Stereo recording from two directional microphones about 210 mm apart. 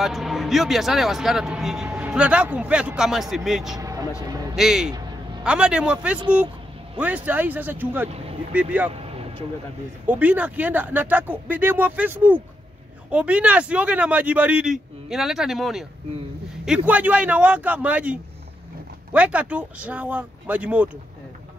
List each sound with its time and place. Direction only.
0.0 s speech: centre (ahead or behind)
3.7 s vehicle: 15° right (ahead or behind)
4.3 s a man's voice: 15° right (ahead or behind)
4.6 s speech: centre (ahead or behind)
8.9 s a sound: 30° right (ahead or behind)
10.0 s speech: 10° right (ahead or behind)